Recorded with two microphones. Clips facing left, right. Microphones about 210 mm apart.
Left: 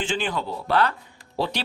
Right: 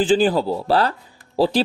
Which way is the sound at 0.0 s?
35° right (ahead or behind).